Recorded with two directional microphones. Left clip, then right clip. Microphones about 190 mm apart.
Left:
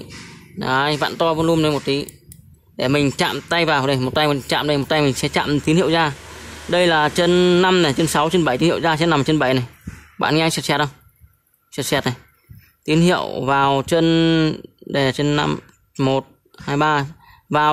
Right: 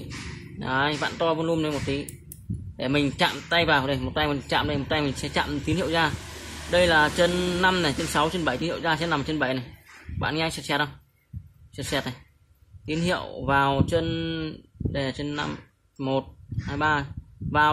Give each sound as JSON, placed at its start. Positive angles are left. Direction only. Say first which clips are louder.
{"t": 0.6, "sound": "speech", "louder": "left 7 dB", "side_deg": 55}